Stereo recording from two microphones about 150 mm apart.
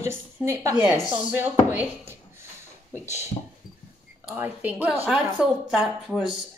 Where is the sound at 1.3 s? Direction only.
10° right (ahead or behind).